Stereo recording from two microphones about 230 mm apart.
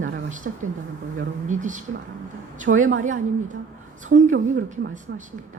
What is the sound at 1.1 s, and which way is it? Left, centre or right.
Speech, right.